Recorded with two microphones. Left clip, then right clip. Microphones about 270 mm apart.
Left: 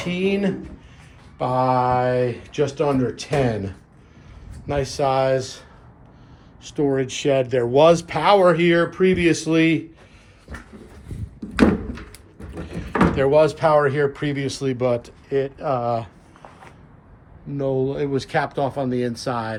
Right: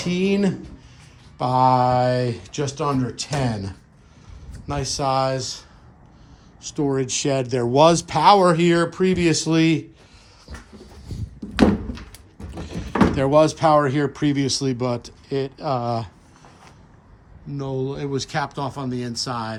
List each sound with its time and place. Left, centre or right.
0.0 s speech: right; by 3.3 s centre
4.6 s speech: centre
12.5 s speech: right
17.5 s speech: centre